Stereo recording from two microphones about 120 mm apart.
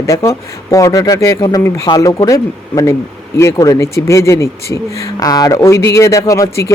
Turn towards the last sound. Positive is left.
turn(degrees=25)  # may be behind; listen again after turning